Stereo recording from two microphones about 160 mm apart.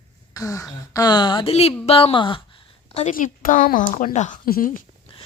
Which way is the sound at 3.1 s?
55° left (ahead or behind).